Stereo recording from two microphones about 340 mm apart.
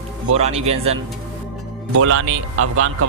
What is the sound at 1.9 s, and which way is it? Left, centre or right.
Speech, right.